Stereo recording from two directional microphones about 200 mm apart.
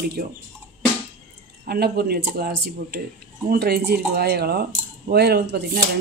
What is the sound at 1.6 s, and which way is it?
Speech, 50° right (ahead or behind).